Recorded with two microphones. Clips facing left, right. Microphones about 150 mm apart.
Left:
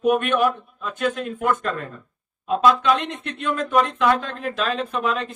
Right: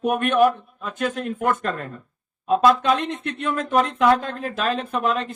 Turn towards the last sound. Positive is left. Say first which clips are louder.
# right 1 dB
turn(degrees=-50)  # may be behind; listen again after turning